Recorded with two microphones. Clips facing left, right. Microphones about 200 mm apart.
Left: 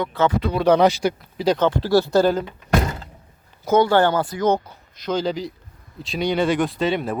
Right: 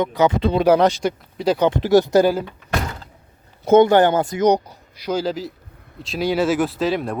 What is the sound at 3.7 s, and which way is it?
Speech, 20° right (ahead or behind).